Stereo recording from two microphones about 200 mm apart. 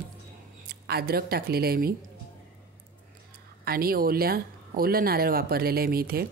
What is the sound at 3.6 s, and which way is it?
Speech, 50° right (ahead or behind).